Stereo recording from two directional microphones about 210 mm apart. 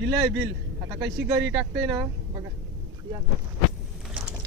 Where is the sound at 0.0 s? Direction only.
55° right (ahead or behind).